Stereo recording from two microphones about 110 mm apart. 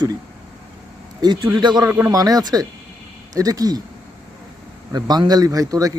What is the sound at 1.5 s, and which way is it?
Speech, 40° right (ahead or behind).